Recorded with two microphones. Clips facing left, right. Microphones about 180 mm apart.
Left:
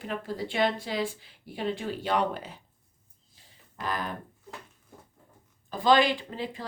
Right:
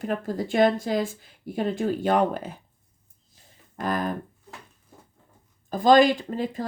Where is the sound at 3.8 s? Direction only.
45° right (ahead or behind).